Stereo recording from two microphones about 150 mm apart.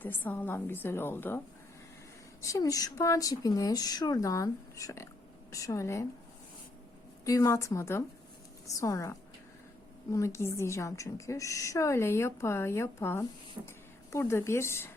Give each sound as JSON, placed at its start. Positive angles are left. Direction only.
{"t": 0.0, "sound": "a woman's voice", "side_deg": 10}
{"t": 2.4, "sound": "a woman's voice", "side_deg": 20}
{"t": 7.3, "sound": "a woman's voice", "side_deg": 20}